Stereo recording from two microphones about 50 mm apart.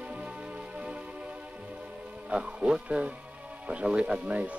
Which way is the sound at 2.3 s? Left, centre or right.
Right.